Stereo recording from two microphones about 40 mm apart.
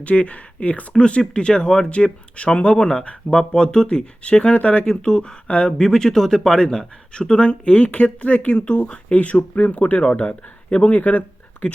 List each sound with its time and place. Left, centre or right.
0.0 s speech: left
0.9 s speech: left
3.5 s speech: centre; by 4.9 s left
4.9 s speech: left
6.6 s speech: centre; by 11.2 s left